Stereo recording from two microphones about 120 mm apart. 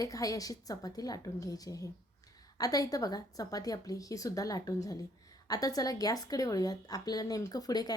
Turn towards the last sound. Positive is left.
turn(degrees=35)  # may be behind; listen again after turning